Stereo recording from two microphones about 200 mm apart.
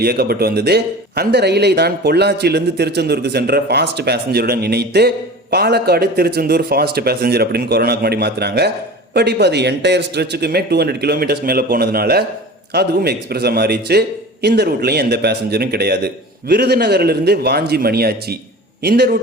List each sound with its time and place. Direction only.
0.0 s speech: 50° right (ahead or behind)